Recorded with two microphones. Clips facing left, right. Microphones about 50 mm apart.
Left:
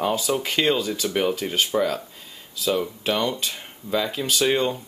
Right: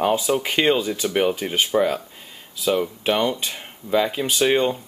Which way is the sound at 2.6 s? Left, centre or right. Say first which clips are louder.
Right 3 dB; right.